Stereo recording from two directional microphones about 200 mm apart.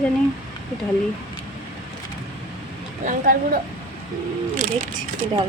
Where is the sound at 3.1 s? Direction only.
45° right (ahead or behind).